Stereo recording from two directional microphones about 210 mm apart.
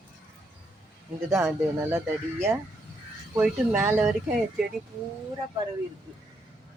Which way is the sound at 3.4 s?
10° right (ahead or behind).